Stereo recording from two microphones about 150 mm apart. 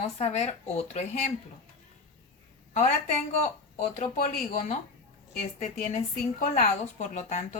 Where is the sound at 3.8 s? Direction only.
55° left (ahead or behind).